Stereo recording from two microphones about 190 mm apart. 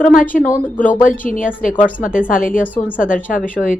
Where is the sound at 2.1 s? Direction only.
45° left (ahead or behind).